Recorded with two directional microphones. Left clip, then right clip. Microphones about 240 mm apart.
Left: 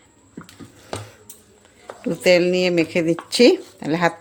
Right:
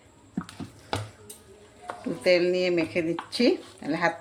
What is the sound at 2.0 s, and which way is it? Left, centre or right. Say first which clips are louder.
Speech: left 6 dB; left.